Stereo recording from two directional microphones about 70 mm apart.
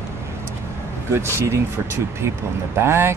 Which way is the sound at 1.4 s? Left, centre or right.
Right.